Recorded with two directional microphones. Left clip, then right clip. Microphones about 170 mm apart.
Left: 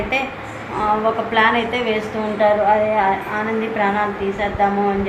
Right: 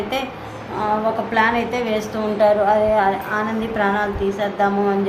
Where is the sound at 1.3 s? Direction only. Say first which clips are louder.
Left 2 dB; 15° right (ahead or behind).